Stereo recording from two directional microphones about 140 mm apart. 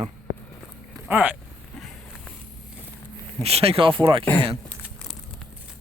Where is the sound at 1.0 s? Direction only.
10° right (ahead or behind).